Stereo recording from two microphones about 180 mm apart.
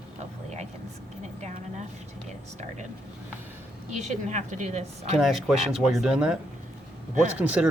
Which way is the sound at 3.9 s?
40° right (ahead or behind).